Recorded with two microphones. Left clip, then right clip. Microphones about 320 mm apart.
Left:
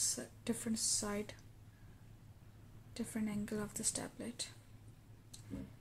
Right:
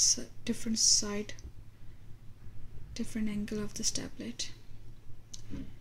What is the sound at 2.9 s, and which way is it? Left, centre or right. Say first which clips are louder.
Speech: right 5 dB; centre.